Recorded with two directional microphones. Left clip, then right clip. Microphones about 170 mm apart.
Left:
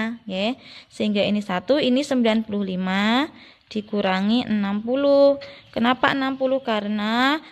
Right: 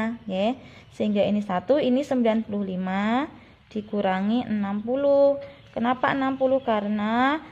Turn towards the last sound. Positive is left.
turn(degrees=30)  # may be behind; listen again after turning